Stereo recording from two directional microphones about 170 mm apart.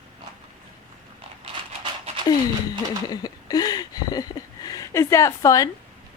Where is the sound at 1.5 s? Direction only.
35° right (ahead or behind).